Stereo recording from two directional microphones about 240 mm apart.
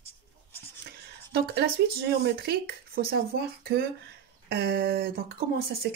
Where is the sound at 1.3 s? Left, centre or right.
Right.